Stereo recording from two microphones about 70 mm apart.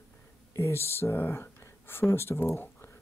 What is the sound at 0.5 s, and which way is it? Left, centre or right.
Speech, left.